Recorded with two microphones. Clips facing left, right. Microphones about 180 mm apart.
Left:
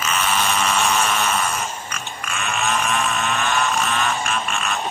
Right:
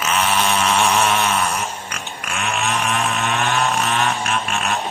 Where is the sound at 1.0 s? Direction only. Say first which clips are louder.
Right 3 dB; 60° right (ahead or behind).